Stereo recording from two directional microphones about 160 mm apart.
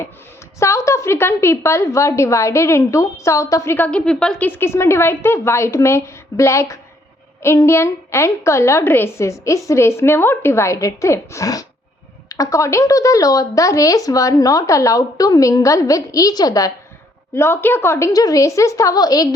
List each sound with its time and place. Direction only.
0.6 s a woman's voice: 15° left (ahead or behind)